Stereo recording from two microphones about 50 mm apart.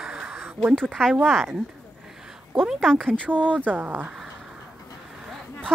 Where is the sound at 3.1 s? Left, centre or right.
Left.